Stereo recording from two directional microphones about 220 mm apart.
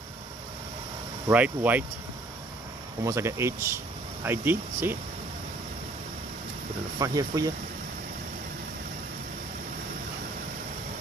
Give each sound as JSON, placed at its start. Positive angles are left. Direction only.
{"t": 1.3, "sound": "speech", "side_deg": -5}
{"t": 3.0, "sound": "speech", "side_deg": -15}
{"t": 7.0, "sound": "speech", "side_deg": -15}